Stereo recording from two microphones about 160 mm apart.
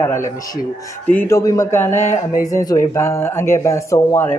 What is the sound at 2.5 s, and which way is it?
Speech, 20° left (ahead or behind).